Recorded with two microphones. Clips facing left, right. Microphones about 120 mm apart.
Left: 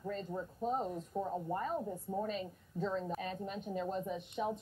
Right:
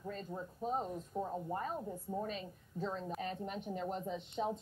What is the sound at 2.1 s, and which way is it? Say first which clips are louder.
Speech: left 2 dB; 20° left (ahead or behind).